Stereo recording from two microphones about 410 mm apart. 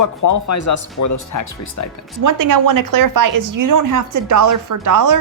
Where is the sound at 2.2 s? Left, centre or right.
Right.